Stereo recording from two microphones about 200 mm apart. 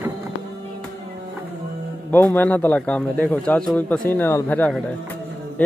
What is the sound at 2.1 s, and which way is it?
A man's voice, 10° left (ahead or behind).